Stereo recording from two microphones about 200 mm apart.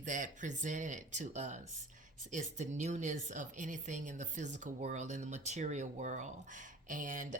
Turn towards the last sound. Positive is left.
turn(degrees=-40)  # may be behind; listen again after turning